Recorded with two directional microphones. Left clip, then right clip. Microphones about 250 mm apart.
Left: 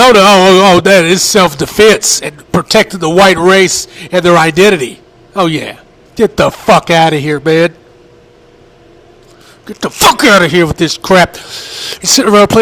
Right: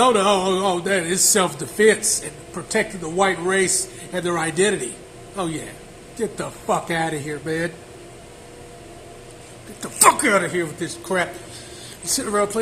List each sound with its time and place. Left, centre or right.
0.0 s speech: left
9.8 s speech: left